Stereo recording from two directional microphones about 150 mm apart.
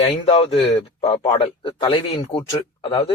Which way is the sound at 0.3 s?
40° left (ahead or behind).